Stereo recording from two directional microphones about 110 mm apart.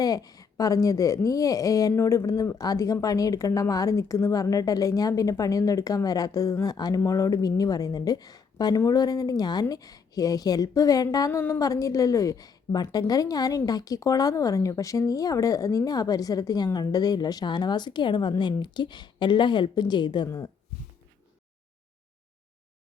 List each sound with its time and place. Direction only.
0.0 s speech: 35° left (ahead or behind)